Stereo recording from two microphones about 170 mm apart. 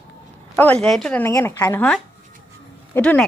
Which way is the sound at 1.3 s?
15° left (ahead or behind).